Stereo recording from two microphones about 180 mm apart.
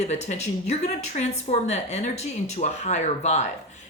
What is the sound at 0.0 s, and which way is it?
Speech, 40° left (ahead or behind).